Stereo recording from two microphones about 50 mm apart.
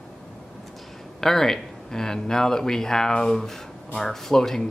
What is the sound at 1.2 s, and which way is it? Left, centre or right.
Speech, centre.